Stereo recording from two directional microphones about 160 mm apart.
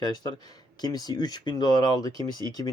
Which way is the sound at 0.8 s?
25° left (ahead or behind).